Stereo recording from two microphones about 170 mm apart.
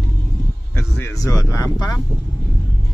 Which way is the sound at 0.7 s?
15° left (ahead or behind).